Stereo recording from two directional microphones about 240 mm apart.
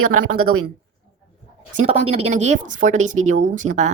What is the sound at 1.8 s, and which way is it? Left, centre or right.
Speech, right.